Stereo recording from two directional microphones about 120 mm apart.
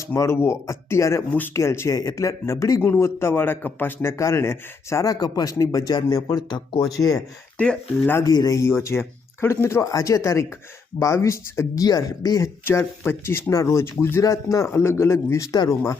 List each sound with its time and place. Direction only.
0.1 s a man's voice: 20° left (ahead or behind); by 6.9 s 35° left (ahead or behind)
7.6 s speech: 10° left (ahead or behind)
8.1 s a man's voice: 30° left (ahead or behind)
12.6 s a man's voice: 20° left (ahead or behind)